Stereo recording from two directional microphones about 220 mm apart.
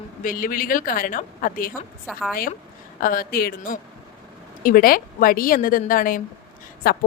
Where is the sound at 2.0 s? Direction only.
Centre (ahead or behind).